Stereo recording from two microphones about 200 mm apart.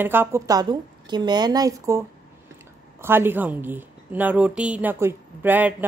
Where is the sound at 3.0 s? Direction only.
10° right (ahead or behind).